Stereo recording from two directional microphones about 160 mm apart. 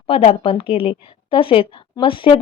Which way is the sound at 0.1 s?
40° left (ahead or behind).